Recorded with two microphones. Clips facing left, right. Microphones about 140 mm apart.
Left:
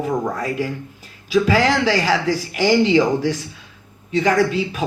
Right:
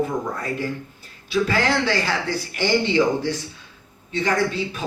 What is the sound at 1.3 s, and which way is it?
Speech, 40° left (ahead or behind).